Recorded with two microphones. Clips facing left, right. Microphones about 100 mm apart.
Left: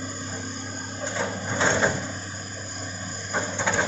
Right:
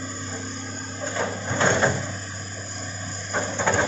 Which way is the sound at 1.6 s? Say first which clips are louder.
Right 2 dB; centre (ahead or behind).